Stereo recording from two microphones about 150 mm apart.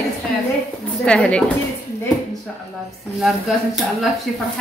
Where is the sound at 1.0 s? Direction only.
5° left (ahead or behind).